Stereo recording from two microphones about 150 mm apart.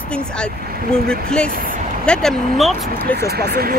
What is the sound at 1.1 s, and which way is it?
Speech, 5° left (ahead or behind).